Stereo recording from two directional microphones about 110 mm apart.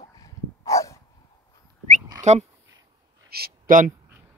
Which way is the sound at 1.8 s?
90° right.